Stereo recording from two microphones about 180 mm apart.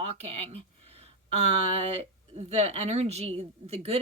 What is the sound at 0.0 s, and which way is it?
Speech, 35° right (ahead or behind).